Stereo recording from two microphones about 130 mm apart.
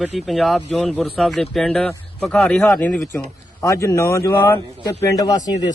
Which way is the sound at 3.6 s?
25° left (ahead or behind).